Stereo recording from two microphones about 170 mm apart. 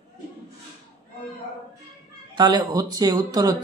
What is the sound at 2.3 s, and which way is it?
Speech, 25° right (ahead or behind).